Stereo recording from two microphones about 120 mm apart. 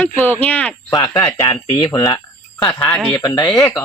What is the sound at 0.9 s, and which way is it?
Speech, 35° left (ahead or behind).